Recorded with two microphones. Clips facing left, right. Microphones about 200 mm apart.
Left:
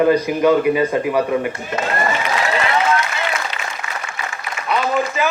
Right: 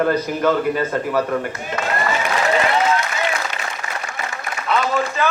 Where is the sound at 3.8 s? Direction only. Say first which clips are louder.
Even; 40° right (ahead or behind).